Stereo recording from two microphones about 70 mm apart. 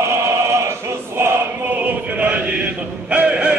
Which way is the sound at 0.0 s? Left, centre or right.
Right.